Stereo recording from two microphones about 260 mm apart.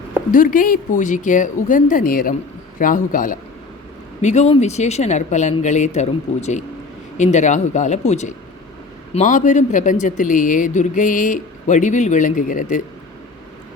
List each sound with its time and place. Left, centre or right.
0.3 s speech: left